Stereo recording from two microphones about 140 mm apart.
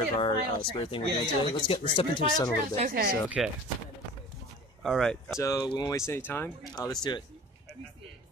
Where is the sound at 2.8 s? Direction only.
90° right.